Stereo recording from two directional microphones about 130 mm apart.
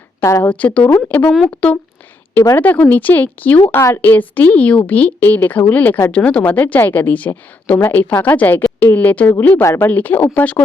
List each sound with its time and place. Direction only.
0.2 s speech: 25° left (ahead or behind)
0.4 s speech: 10° left (ahead or behind)